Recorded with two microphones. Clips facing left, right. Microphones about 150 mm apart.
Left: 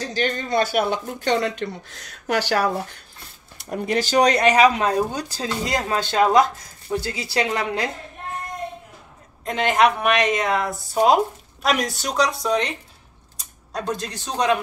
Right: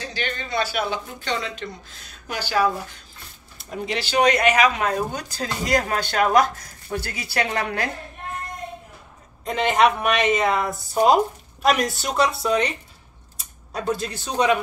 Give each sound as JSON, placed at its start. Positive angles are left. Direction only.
{"t": 0.0, "sound": "speech", "side_deg": 40}
{"t": 3.7, "sound": "speech", "side_deg": 50}
{"t": 9.4, "sound": "a woman's voice", "side_deg": 0}
{"t": 13.7, "sound": "a woman's voice", "side_deg": -5}